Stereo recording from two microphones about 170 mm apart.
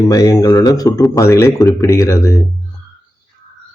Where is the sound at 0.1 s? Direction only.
20° left (ahead or behind).